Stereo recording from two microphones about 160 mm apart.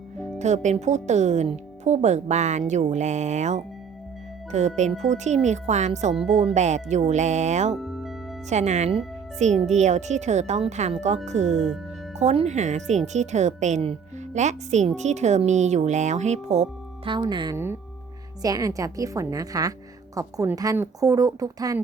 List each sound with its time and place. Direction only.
0.3 s speech: 45° right (ahead or behind)
4.8 s speech: 45° right (ahead or behind)
7.8 s music: centre (ahead or behind)
8.4 s speech: 45° right (ahead or behind)
17.1 s speech: 30° right (ahead or behind)